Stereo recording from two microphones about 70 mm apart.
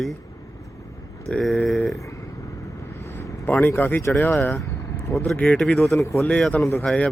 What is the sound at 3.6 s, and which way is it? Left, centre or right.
Speech, left.